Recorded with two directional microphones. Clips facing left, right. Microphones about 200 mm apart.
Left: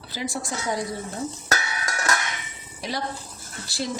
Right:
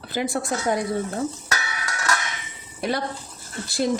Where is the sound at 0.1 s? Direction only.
55° right (ahead or behind).